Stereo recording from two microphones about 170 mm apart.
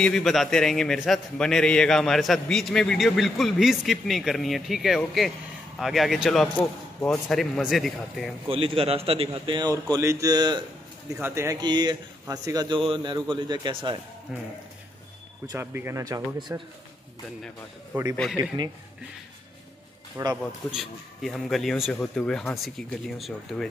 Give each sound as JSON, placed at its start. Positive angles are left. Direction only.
{"t": 0.0, "sound": "a man's voice", "side_deg": 0}
{"t": 8.5, "sound": "a man's voice", "side_deg": -30}
{"t": 11.1, "sound": "speech", "side_deg": -15}
{"t": 11.6, "sound": "a man's voice", "side_deg": -25}
{"t": 14.3, "sound": "a man's voice", "side_deg": 0}
{"t": 15.4, "sound": "a man's voice", "side_deg": -15}
{"t": 18.1, "sound": "a man's voice", "side_deg": 0}
{"t": 20.2, "sound": "speech", "side_deg": -15}
{"t": 20.7, "sound": "a man's voice", "side_deg": 0}